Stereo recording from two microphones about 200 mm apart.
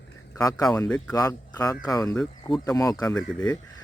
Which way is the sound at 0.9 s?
5° left (ahead or behind).